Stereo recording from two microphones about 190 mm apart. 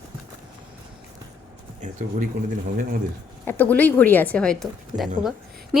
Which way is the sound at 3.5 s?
10° left (ahead or behind).